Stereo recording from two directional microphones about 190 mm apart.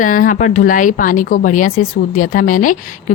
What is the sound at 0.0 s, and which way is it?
Speech, 45° left (ahead or behind).